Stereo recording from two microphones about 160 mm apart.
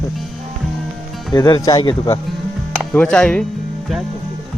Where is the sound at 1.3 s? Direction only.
25° left (ahead or behind).